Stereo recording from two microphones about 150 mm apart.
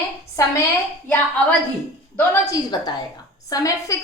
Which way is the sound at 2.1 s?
20° left (ahead or behind).